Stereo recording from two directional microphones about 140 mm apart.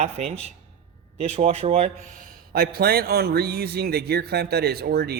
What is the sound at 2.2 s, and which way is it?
A man's voice, 90° right.